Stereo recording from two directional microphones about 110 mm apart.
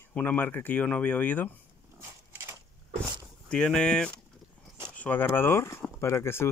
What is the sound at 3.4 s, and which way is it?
Speech, 10° left (ahead or behind).